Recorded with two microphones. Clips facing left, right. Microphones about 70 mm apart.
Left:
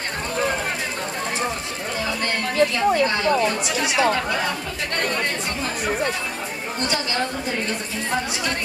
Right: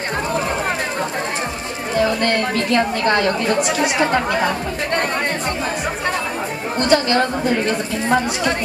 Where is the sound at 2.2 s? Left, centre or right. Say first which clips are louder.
Right 2 dB; right.